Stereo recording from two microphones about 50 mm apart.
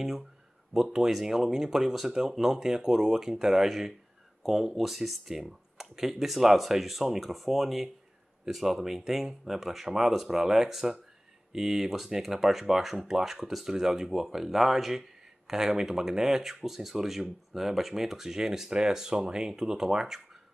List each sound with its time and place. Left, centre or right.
0.7 s speech: centre